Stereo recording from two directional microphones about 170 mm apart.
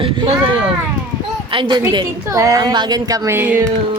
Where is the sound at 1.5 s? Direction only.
30° right (ahead or behind); by 3.6 s 10° right (ahead or behind).